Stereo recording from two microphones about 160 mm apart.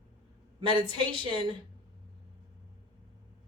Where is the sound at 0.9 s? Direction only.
30° right (ahead or behind).